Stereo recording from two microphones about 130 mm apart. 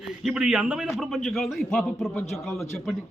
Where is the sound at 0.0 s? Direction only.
Centre (ahead or behind).